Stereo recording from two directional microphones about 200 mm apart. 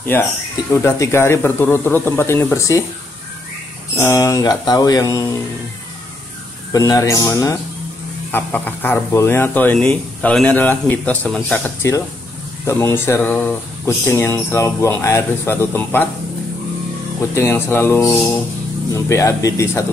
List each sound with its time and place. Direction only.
0.0 s speech: 10° left (ahead or behind)
3.9 s speech: 15° left (ahead or behind)
6.7 s speech: 15° left (ahead or behind)
17.3 s speech: 15° left (ahead or behind)